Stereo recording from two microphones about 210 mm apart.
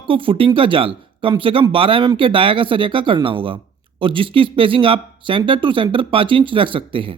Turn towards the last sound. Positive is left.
turn(degrees=-25)  # may be behind; listen again after turning